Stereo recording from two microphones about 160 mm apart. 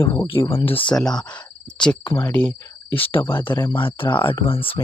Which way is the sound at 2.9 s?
35° left (ahead or behind).